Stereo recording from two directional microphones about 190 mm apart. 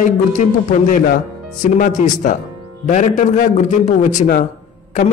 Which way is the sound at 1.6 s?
45° left (ahead or behind).